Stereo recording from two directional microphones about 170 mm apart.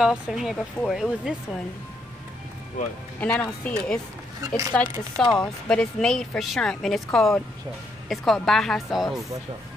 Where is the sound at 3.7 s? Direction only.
5° left (ahead or behind).